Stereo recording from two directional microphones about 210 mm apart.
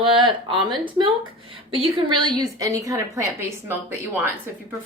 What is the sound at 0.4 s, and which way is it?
A woman's voice, 25° right (ahead or behind).